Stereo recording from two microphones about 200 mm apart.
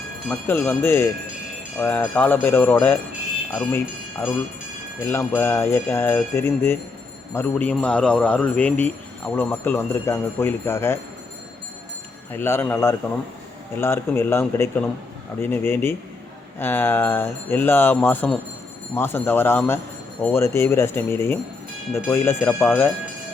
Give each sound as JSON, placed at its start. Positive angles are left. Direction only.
{"t": 0.3, "sound": "a man's voice", "side_deg": 10}
{"t": 5.0, "sound": "a man's voice", "side_deg": 10}
{"t": 12.3, "sound": "a man's voice", "side_deg": 10}